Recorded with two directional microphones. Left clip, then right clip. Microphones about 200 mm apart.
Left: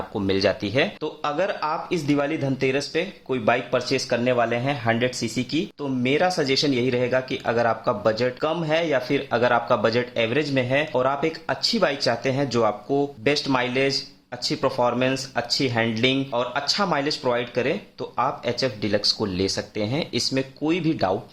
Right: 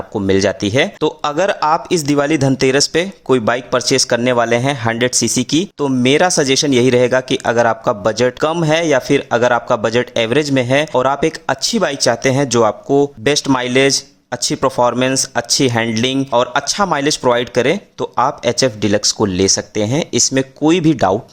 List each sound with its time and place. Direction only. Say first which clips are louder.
0.1 s speech: right 8 dB; 35° right (ahead or behind)
1.0 s speech: right 9 dB; 50° right (ahead or behind)